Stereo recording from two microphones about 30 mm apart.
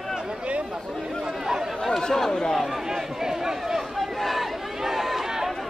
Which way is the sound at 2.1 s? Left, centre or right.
Centre.